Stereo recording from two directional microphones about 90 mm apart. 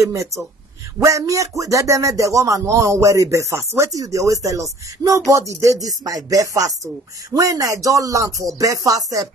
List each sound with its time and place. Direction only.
0.0 s speech: 35° right (ahead or behind)